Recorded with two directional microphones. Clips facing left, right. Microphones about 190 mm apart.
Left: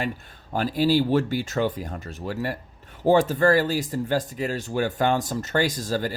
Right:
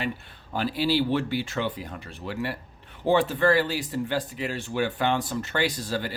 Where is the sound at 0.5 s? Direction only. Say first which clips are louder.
Left 4 dB; 45° left (ahead or behind).